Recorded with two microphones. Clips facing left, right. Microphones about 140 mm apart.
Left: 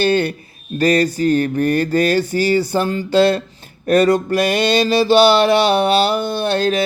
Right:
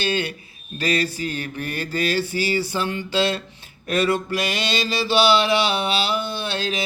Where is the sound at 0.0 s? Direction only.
50° left (ahead or behind).